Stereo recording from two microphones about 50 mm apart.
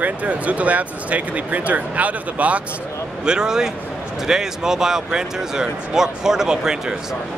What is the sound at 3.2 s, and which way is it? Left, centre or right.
Speech, centre.